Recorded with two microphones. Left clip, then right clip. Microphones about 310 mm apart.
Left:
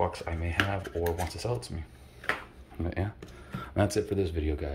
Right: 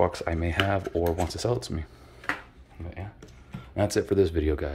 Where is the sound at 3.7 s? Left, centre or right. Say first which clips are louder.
Right 2 dB; centre.